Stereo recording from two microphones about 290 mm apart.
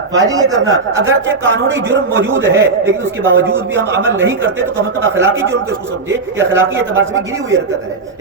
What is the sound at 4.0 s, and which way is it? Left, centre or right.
Speech, right.